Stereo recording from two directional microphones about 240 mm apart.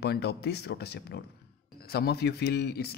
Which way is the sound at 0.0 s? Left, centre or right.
Left.